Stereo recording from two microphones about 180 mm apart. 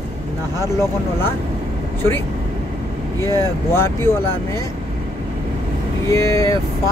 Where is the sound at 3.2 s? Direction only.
15° left (ahead or behind).